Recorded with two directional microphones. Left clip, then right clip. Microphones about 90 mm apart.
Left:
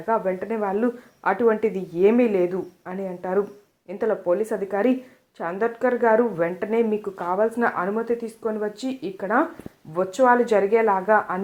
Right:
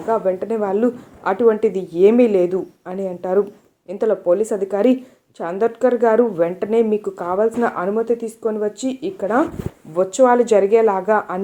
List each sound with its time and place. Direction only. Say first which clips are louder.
0.1 s speech: right 5 dB; 35° right (ahead or behind)